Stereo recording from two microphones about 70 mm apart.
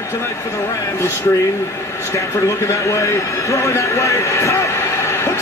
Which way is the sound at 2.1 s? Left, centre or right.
Left.